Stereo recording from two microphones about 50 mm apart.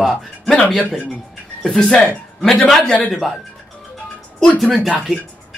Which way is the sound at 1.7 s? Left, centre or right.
Centre.